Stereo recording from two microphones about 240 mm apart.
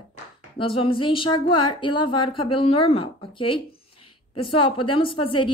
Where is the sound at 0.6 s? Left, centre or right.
Left.